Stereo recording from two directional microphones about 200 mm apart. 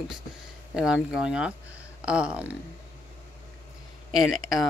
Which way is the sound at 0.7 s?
5° right (ahead or behind).